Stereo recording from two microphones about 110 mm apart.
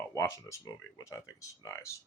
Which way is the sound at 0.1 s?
30° left (ahead or behind).